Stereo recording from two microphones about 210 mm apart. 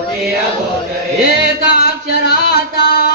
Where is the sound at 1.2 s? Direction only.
50° left (ahead or behind).